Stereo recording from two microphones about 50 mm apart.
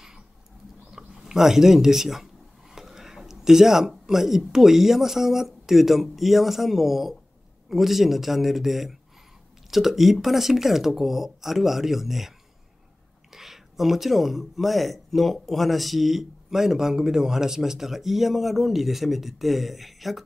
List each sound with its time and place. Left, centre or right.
0.9 s speech: centre
2.7 s a sound: centre
4.5 s a man's voice: centre
13.3 s a man's voice: centre